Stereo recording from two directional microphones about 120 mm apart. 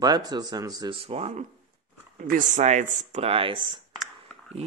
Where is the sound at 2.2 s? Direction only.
85° right; by 3.7 s 45° right (ahead or behind).